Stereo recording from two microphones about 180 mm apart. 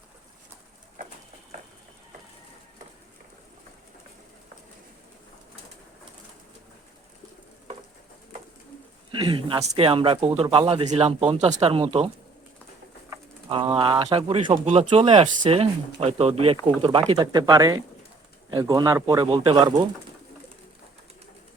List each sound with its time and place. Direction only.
9.1 s speech: 25° right (ahead or behind)
13.5 s speech: 30° right (ahead or behind)
19.3 s speech: 30° right (ahead or behind)
19.6 s speech: 20° right (ahead or behind)